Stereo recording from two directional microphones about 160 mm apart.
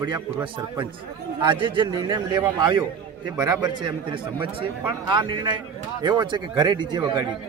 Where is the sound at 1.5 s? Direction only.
30° right (ahead or behind).